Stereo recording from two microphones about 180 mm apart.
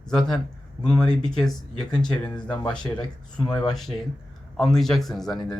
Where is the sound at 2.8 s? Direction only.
25° left (ahead or behind).